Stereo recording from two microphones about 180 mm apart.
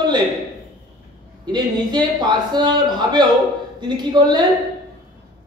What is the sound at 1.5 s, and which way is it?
A man's voice, 25° right (ahead or behind).